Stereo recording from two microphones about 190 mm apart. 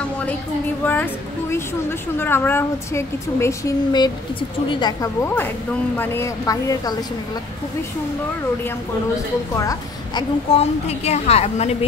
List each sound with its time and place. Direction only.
0.8 s a woman's voice: 10° left (ahead or behind)
9.6 s a woman's voice: 20° left (ahead or behind)
10.5 s a woman's voice: 35° left (ahead or behind)